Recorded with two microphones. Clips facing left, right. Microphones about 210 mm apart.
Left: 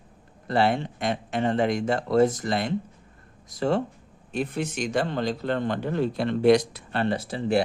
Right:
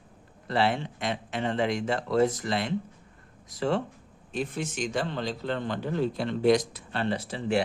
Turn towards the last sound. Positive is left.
turn(degrees=40)  # may be behind; listen again after turning